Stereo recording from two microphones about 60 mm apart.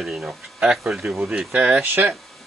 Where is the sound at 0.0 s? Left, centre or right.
Centre.